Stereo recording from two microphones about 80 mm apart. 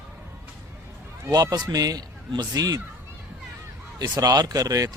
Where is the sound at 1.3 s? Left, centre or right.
Right.